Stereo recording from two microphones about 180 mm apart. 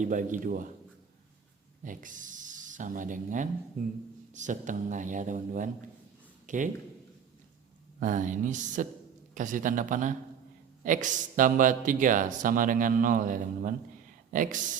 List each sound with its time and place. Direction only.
0.0 s speech: 45° right (ahead or behind)
1.8 s speech: 45° right (ahead or behind)
7.9 s speech: 45° right (ahead or behind)